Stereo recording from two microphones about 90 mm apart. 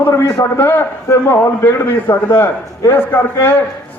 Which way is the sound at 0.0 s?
25° left (ahead or behind).